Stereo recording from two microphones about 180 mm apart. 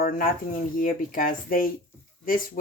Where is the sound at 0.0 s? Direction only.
50° left (ahead or behind).